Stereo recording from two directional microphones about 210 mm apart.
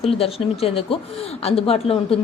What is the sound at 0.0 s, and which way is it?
A woman's voice, 30° left (ahead or behind).